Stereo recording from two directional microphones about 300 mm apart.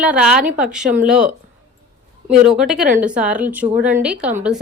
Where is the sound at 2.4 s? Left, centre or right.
Centre.